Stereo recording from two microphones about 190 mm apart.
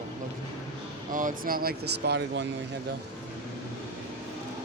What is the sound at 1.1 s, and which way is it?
Speech, 45° right (ahead or behind).